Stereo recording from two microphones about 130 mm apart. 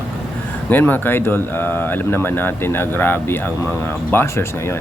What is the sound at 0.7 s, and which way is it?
Speech, 15° left (ahead or behind).